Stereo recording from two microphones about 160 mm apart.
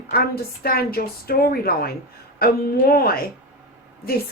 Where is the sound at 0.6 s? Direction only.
70° left (ahead or behind).